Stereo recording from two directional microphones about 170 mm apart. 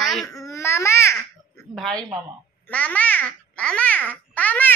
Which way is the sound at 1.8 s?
5° left (ahead or behind).